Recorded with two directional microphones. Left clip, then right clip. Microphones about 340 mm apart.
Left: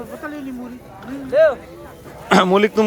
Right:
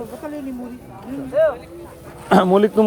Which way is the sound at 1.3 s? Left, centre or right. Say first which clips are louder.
Left 3 dB; left.